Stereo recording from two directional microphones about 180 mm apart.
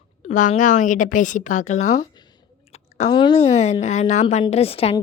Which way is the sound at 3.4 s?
40° left (ahead or behind).